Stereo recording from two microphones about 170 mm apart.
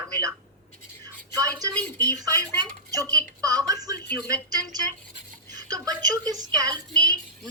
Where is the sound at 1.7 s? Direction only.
10° left (ahead or behind).